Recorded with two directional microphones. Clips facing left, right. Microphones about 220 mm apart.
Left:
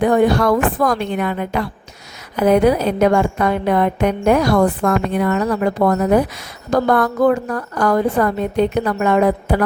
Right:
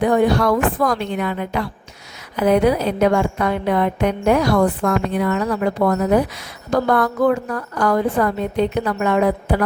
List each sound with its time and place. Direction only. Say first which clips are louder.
0.0 s a woman's voice: left 2 dB; 50° left (ahead or behind)